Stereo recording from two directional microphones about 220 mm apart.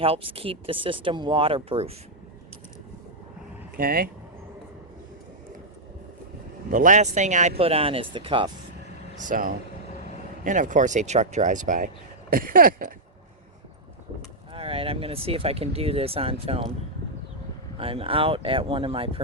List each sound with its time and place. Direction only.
0.0 s speech: 25° right (ahead or behind)
3.8 s speech: 40° right (ahead or behind)
6.7 s speech: 35° right (ahead or behind)
9.1 s speech: 35° right (ahead or behind)
14.5 s speech: 25° right (ahead or behind)
17.7 s speech: 25° right (ahead or behind)